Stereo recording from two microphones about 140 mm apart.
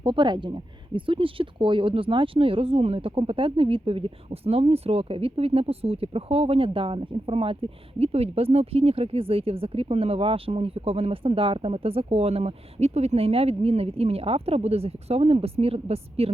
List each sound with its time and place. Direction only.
0.0 s speech: 35° right (ahead or behind)